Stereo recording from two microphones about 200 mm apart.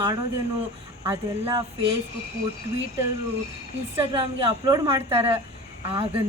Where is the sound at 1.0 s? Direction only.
10° right (ahead or behind).